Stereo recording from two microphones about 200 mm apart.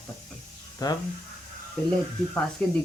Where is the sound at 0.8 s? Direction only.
20° left (ahead or behind).